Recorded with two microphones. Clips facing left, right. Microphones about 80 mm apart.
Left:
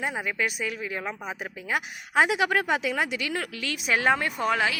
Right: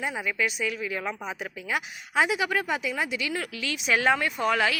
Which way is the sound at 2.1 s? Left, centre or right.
Left.